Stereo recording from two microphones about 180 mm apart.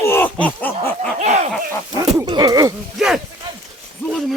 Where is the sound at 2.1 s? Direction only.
20° right (ahead or behind).